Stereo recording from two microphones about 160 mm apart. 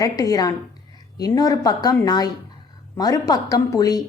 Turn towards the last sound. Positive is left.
turn(degrees=25)  # may be behind; listen again after turning